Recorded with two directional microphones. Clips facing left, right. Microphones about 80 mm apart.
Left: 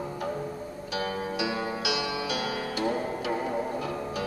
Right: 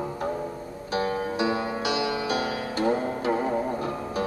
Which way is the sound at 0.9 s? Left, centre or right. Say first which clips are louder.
Right 5 dB; right.